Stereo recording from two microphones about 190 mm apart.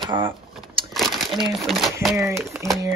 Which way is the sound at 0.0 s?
25° right (ahead or behind).